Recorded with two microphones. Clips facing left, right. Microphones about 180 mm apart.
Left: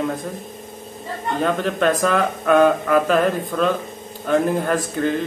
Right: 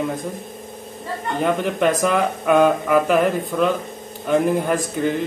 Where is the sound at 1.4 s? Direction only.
15° right (ahead or behind).